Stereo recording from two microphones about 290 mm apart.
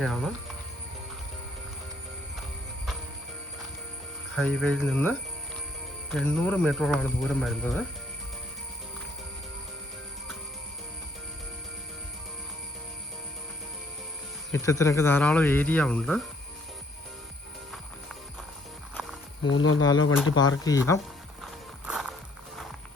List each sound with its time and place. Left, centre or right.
0.0 s speech: centre
4.4 s speech: centre
14.5 s speech: centre
19.5 s speech: left
20.3 s speech: centre
21.4 s horse: centre